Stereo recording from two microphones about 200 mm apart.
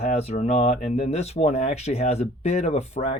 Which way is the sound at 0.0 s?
30° left (ahead or behind).